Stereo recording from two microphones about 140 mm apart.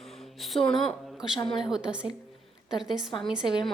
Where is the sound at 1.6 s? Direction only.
5° right (ahead or behind).